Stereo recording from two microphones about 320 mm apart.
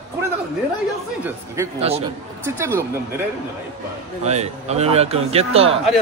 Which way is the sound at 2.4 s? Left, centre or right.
Centre.